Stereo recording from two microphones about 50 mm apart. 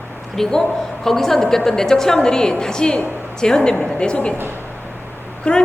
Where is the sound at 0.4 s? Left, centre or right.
Centre.